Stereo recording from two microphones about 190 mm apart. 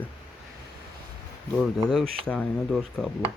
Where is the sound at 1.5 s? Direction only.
Centre (ahead or behind).